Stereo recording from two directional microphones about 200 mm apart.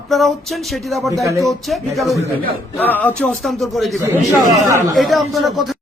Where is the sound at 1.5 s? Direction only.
Centre (ahead or behind).